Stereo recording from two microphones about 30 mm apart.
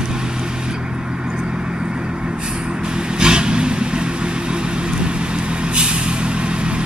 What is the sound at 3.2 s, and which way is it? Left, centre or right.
Vehicle, right.